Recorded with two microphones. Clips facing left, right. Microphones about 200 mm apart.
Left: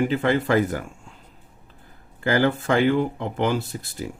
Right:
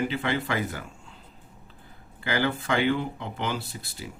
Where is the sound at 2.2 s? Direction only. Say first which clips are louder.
Left 6 dB; 45° left (ahead or behind).